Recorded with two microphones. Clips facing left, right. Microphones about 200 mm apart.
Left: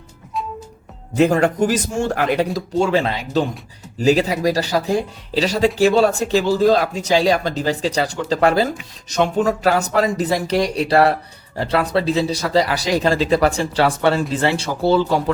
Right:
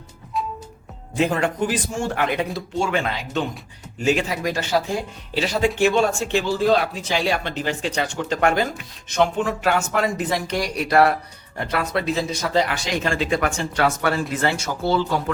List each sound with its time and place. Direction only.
0.3 s music: centre (ahead or behind)
1.1 s speech: 40° left (ahead or behind)